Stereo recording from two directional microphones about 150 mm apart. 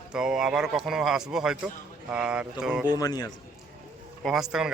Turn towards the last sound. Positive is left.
turn(degrees=-5)  # may be behind; listen again after turning